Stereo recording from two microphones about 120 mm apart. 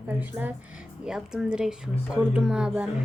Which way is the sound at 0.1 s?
15° right (ahead or behind).